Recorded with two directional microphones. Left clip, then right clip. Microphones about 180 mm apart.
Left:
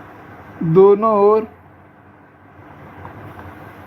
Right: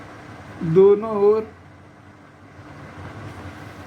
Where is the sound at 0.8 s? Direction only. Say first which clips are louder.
Left 4 dB; 40° left (ahead or behind).